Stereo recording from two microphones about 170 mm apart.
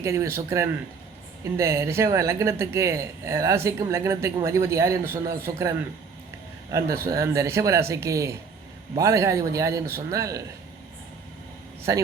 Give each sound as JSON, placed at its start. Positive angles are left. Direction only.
{"t": 0.0, "sound": "speech", "side_deg": -15}
{"t": 11.8, "sound": "a man's voice", "side_deg": -20}